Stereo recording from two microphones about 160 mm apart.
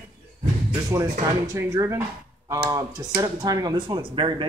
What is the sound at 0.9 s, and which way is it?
A man's voice, 20° right (ahead or behind).